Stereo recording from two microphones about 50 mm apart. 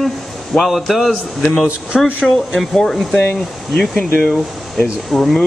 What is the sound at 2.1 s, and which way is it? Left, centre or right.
Speech, centre.